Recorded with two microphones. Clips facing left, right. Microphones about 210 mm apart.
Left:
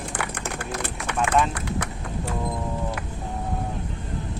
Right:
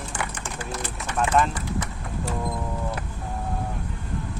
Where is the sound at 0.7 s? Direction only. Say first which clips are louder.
Left 2 dB; 65° left (ahead or behind).